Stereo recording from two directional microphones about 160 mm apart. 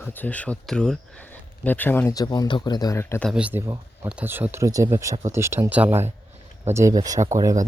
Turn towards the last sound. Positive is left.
turn(degrees=-20)  # may be behind; listen again after turning